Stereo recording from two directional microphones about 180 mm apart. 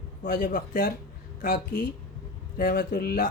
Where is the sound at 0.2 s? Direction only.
55° left (ahead or behind).